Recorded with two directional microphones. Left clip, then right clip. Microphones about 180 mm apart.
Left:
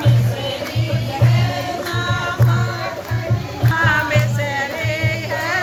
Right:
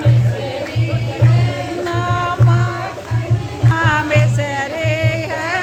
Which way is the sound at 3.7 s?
35° right (ahead or behind).